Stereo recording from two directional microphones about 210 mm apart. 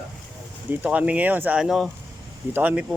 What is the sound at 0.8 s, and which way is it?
Speech, 5° right (ahead or behind).